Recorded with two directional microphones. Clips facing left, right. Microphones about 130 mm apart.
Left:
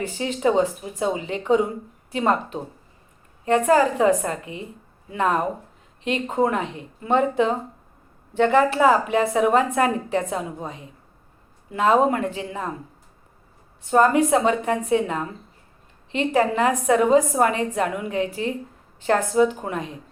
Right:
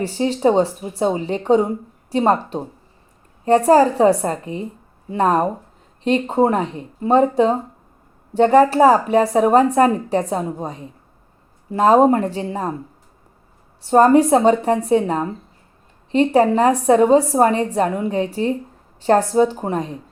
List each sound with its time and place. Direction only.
0.0 s a woman's voice: 35° right (ahead or behind)
13.8 s a woman's voice: 35° right (ahead or behind)